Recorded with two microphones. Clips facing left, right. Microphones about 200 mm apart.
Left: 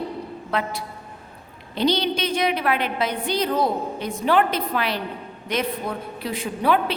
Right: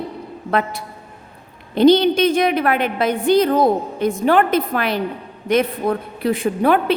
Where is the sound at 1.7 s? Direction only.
50° right (ahead or behind).